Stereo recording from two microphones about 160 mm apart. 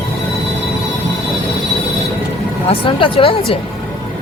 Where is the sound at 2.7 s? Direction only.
35° left (ahead or behind).